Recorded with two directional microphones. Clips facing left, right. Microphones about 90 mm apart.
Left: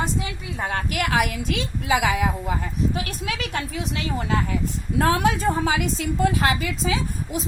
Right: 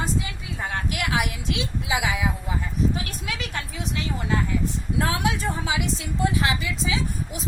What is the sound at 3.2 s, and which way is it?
Speech, 40° left (ahead or behind).